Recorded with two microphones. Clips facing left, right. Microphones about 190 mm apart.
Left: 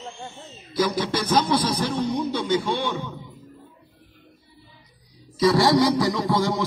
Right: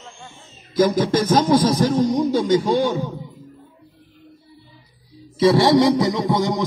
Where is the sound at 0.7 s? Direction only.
45° right (ahead or behind).